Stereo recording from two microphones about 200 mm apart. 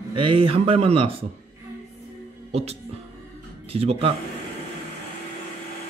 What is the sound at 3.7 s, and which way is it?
Speech, 30° right (ahead or behind).